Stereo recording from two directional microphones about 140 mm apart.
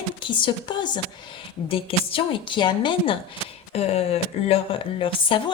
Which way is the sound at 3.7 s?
50° left (ahead or behind).